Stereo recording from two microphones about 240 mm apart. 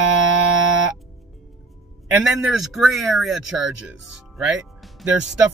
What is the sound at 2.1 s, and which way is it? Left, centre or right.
Speech, centre.